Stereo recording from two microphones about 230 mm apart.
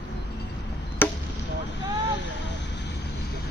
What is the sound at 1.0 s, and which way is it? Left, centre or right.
Chop, centre.